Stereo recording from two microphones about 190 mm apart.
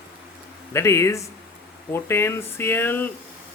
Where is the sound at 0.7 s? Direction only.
15° left (ahead or behind).